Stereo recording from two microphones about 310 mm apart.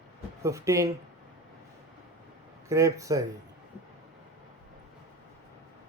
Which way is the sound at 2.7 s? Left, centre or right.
Centre.